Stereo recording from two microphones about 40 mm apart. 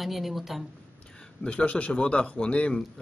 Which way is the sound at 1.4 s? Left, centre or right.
Left.